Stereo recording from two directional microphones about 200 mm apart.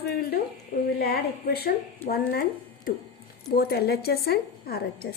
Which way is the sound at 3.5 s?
50° left (ahead or behind).